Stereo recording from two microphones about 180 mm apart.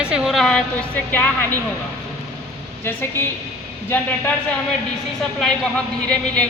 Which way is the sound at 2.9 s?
10° left (ahead or behind).